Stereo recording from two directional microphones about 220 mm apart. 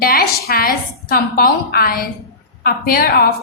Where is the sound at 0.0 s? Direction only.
45° left (ahead or behind).